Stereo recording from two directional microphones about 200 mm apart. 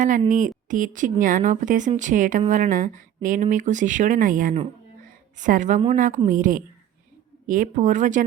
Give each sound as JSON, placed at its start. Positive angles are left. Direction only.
{"t": 0.3, "sound": "speech", "side_deg": -40}